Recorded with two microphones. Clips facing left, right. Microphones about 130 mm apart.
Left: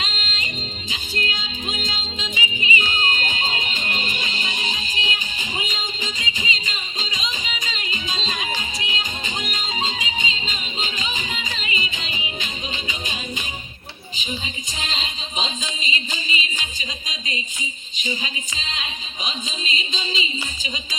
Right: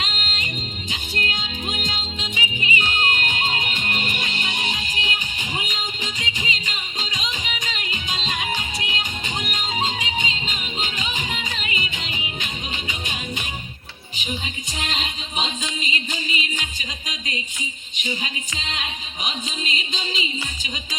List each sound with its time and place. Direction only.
0.2 s music: 55° right (ahead or behind)
14.8 s music: 55° right (ahead or behind)
17.1 s a sound: 50° right (ahead or behind)
17.9 s music: 55° right (ahead or behind)